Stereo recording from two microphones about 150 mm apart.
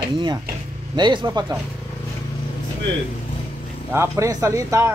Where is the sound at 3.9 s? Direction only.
20° right (ahead or behind).